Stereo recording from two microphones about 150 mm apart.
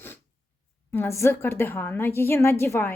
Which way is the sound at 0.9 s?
20° left (ahead or behind).